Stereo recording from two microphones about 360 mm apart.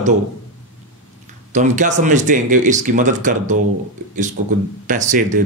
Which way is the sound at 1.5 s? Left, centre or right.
Centre.